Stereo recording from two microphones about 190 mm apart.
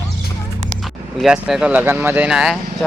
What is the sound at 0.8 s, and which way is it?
Speech, centre (ahead or behind).